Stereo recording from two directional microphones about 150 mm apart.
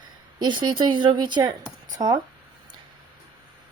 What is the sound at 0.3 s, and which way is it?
A woman's voice, 30° right (ahead or behind).